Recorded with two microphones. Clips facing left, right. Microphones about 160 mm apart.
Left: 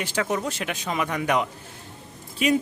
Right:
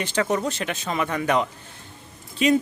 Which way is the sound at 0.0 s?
10° left (ahead or behind).